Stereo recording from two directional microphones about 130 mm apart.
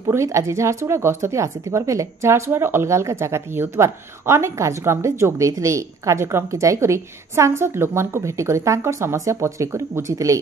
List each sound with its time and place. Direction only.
0.1 s speech: 20° right (ahead or behind)